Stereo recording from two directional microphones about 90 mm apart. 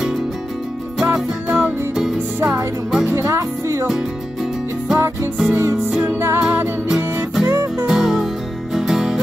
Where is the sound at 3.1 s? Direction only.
35° right (ahead or behind).